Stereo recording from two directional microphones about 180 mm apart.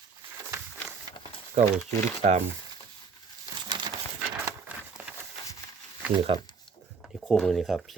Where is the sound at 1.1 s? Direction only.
30° left (ahead or behind).